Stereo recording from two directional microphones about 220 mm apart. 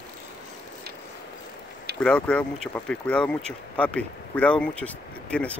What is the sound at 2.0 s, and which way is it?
Speech, 5° left (ahead or behind).